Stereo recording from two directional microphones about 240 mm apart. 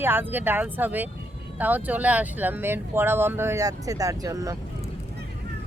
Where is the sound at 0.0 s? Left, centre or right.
Centre.